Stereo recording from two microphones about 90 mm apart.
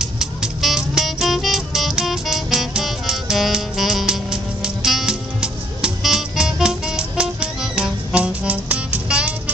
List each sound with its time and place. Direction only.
0.0 s music: 5° right (ahead or behind)